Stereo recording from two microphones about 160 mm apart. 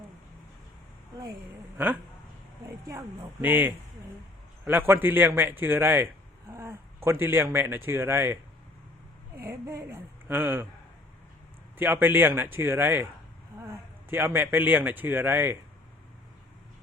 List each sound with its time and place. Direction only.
2.6 s a man's voice: 20° right (ahead or behind)
11.8 s a man's voice: 10° right (ahead or behind)